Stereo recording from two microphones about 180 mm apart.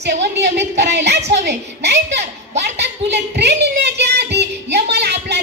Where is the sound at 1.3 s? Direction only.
75° right (ahead or behind).